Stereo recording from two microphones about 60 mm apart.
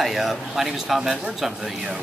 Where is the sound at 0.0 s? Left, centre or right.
Centre.